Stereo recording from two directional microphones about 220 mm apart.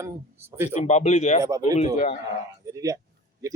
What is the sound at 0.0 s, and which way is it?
Speech, 10° right (ahead or behind).